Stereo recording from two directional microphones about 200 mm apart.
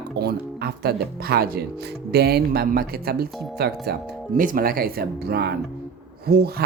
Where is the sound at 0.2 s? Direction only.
50° right (ahead or behind).